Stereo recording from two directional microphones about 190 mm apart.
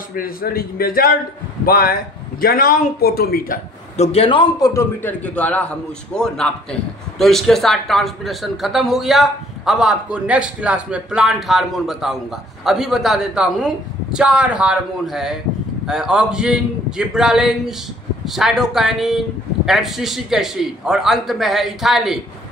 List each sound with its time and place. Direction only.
0.1 s speech: 50° left (ahead or behind)
3.9 s a man's voice: 35° left (ahead or behind); by 22.2 s centre (ahead or behind)